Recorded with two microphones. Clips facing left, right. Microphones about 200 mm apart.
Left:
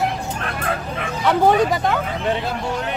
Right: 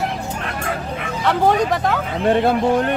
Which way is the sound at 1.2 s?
Centre (ahead or behind).